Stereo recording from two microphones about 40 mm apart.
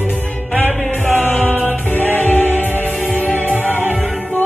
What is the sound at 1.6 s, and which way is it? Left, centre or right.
Music, left.